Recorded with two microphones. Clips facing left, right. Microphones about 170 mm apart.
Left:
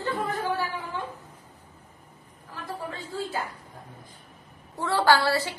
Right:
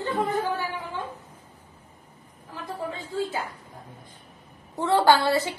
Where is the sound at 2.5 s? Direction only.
20° right (ahead or behind).